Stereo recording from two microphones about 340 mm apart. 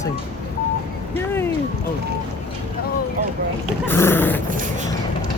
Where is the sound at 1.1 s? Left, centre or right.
Centre.